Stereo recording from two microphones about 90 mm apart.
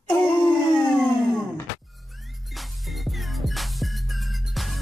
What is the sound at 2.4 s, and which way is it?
Music, centre (ahead or behind).